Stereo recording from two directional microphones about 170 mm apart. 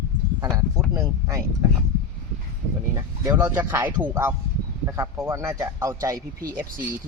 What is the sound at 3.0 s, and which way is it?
A man's voice, 15° right (ahead or behind).